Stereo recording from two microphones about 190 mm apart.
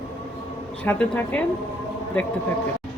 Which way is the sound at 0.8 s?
10° left (ahead or behind).